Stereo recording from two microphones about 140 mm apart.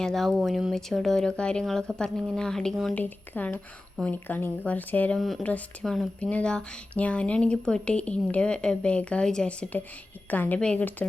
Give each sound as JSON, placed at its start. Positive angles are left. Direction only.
{"t": 0.0, "sound": "speech", "side_deg": 5}